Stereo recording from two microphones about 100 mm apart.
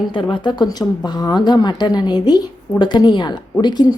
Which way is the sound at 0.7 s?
45° left (ahead or behind).